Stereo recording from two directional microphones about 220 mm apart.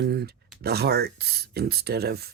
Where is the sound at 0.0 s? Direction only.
45° right (ahead or behind).